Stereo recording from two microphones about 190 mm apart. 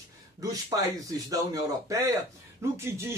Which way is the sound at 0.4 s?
20° right (ahead or behind).